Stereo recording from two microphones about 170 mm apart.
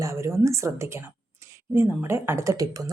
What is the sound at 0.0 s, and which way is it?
A woman's voice, 15° right (ahead or behind).